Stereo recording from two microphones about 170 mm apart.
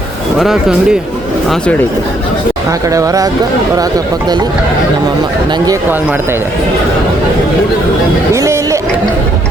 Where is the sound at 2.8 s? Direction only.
20° right (ahead or behind).